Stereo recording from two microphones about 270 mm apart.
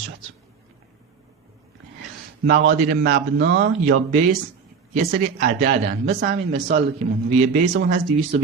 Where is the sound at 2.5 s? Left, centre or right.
Right.